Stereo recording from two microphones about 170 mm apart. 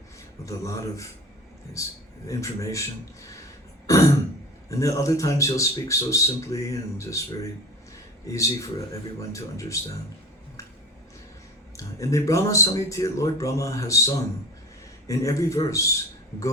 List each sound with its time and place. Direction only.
0.4 s a man's voice: 20° left (ahead or behind)
3.8 s throat clearing: 20° left (ahead or behind)
4.7 s speech: 20° left (ahead or behind)
11.8 s speech: 20° left (ahead or behind)